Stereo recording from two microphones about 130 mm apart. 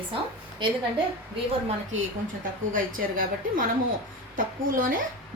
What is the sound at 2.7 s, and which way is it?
Speech, 90° right.